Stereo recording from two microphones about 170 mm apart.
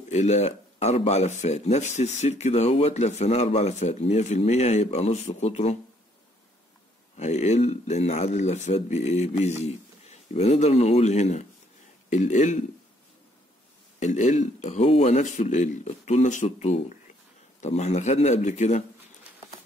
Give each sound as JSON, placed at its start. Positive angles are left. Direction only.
{"t": 0.1, "sound": "speech", "side_deg": 40}
{"t": 7.2, "sound": "speech", "side_deg": 40}
{"t": 13.9, "sound": "speech", "side_deg": 45}